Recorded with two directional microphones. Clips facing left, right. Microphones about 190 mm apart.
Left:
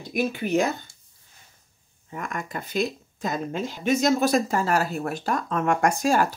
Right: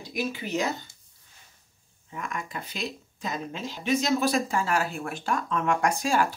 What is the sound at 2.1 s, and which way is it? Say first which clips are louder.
Speech: left 3 dB; 50° left (ahead or behind).